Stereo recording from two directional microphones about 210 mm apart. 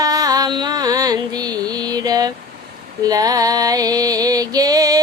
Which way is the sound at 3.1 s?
15° right (ahead or behind).